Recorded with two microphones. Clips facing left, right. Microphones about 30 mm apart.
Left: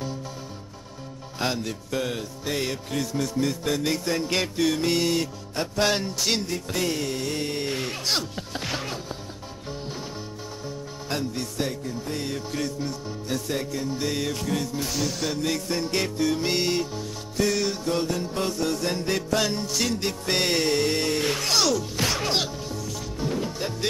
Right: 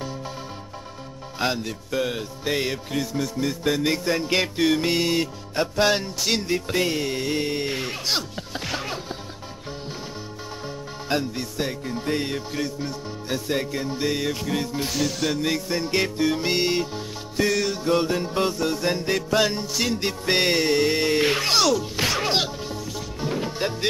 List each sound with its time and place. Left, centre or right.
1.4 s music: centre
6.4 s music: right; by 8.9 s centre
11.1 s music: centre
11.8 s music: right
12.4 s music: centre
14.9 s music: centre
15.4 s music: centre
17.5 s music: centre
17.8 s music: right
21.2 s music: right
21.5 s music: centre